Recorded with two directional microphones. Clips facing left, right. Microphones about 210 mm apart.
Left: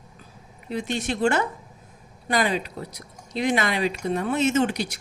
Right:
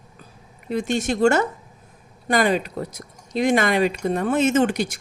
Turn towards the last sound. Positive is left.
turn(degrees=-50)  # may be behind; listen again after turning